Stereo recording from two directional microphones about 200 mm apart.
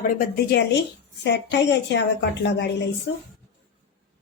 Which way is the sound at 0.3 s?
55° left (ahead or behind).